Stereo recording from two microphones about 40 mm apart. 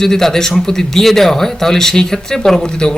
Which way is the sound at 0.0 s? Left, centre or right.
Centre.